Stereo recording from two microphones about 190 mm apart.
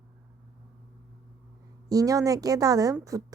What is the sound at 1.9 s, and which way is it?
A woman's voice, 20° right (ahead or behind).